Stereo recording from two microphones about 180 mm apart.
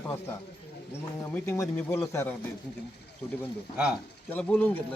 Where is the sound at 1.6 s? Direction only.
5° left (ahead or behind).